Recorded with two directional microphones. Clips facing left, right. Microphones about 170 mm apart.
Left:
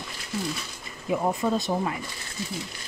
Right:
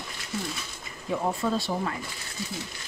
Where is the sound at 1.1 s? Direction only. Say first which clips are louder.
Left 2 dB; 15° left (ahead or behind).